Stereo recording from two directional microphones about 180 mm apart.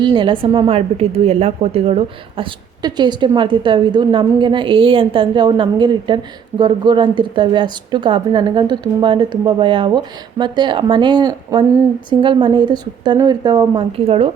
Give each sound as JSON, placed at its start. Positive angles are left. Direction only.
{"t": 0.0, "sound": "a woman's voice", "side_deg": -25}